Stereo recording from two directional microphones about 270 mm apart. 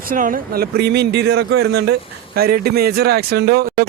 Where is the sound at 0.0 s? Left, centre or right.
Right.